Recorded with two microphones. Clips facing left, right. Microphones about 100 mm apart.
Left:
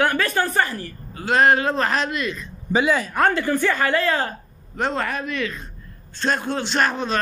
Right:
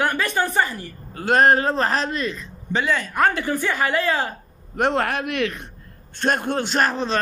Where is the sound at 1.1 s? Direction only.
50° right (ahead or behind); by 2.4 s 35° right (ahead or behind).